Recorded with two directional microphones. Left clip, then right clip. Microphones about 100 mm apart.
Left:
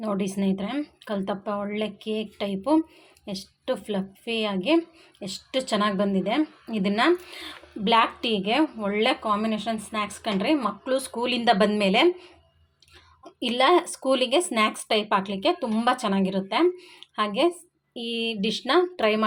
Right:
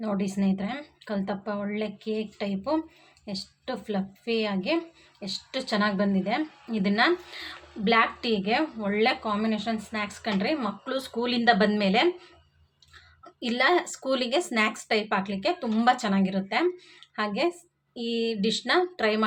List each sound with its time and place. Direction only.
0.0 s a woman's voice: 45° left (ahead or behind)
13.4 s a woman's voice: 35° left (ahead or behind)